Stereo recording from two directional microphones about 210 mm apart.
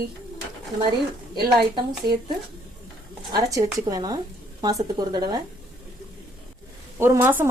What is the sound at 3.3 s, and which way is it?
A woman's voice, 15° right (ahead or behind).